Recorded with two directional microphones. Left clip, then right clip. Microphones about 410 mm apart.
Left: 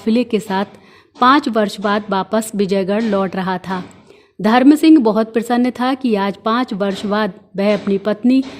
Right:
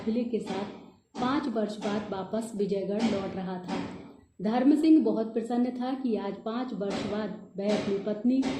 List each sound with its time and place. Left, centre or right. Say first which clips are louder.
0.1 s a woman's voice: left 14 dB; left